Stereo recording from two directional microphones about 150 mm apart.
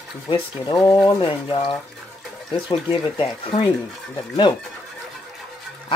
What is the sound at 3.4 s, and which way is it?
Speech, 35° left (ahead or behind).